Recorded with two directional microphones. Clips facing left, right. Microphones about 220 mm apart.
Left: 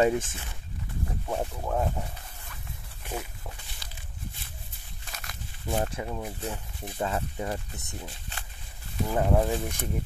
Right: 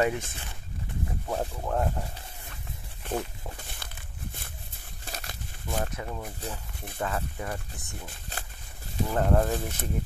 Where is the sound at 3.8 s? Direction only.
55° right (ahead or behind).